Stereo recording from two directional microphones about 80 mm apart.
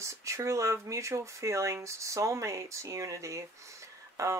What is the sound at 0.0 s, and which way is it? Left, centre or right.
Speech, right.